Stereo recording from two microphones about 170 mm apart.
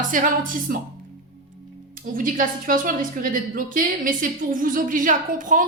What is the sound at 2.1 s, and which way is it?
A woman's voice, 55° right (ahead or behind).